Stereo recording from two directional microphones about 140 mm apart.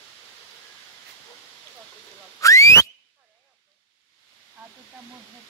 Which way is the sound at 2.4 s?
20° left (ahead or behind).